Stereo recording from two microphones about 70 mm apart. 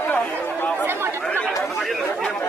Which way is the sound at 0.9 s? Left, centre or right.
Right.